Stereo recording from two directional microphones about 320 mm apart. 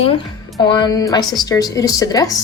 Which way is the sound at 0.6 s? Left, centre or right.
Centre.